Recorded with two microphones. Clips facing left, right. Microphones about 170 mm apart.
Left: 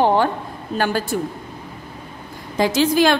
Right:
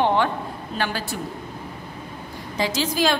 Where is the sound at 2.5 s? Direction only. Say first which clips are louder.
Left 7 dB; 55° left (ahead or behind).